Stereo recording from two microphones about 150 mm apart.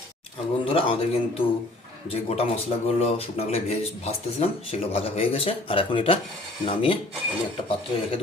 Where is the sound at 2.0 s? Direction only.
40° left (ahead or behind).